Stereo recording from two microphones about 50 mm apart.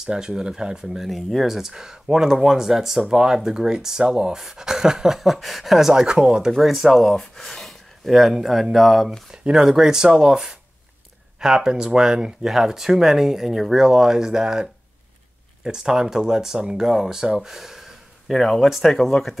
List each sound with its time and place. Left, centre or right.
0.0 s speech: centre
1.0 s speech: centre
6.6 s speech: centre
8.1 s speech: centre
9.3 s speech: centre
18.3 s speech: centre